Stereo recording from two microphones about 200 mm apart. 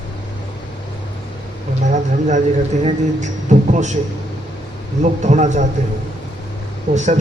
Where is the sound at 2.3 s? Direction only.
35° right (ahead or behind).